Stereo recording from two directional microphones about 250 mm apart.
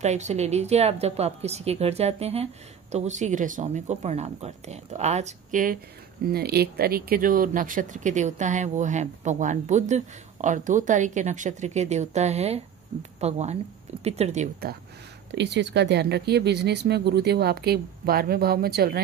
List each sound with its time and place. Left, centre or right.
0.0 s speech: right